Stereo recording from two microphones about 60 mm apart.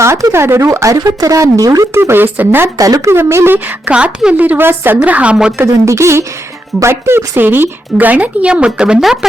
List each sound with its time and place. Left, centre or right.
0.0 s speech: right
1.9 s speech: right
2.7 s a woman's voice: right
3.1 s speech: right
3.9 s a woman's voice: centre
4.4 s speech: right
4.9 s speech: right
5.8 s speech: right; by 9.0 s centre